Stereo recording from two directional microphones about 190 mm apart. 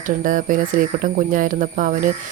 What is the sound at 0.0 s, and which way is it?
Speech, 45° right (ahead or behind).